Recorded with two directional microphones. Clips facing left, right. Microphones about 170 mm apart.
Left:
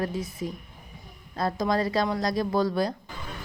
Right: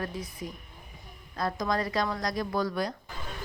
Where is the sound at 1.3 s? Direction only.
30° left (ahead or behind).